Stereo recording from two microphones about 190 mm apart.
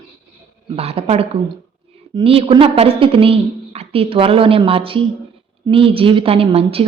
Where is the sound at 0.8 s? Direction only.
30° right (ahead or behind).